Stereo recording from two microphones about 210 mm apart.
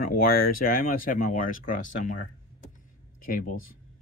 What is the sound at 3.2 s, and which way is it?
Speech, 40° left (ahead or behind).